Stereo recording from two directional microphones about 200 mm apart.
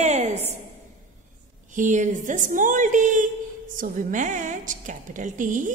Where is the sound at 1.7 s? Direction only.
40° right (ahead or behind).